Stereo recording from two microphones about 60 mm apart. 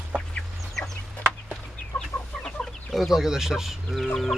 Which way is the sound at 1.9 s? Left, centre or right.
Left.